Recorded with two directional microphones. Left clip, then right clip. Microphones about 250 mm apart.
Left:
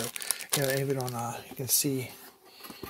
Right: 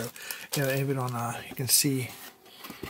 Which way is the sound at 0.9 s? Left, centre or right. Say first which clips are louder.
Right 2 dB; centre.